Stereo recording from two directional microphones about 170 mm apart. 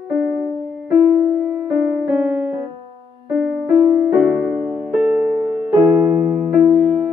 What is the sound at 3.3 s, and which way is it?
Music, centre (ahead or behind).